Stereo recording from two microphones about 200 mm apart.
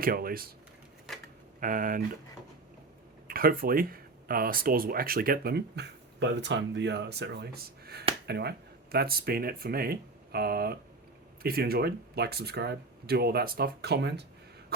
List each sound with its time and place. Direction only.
0.0 s speech: 45° right (ahead or behind)
1.6 s speech: 45° right (ahead or behind)
3.2 s speech: 45° right (ahead or behind)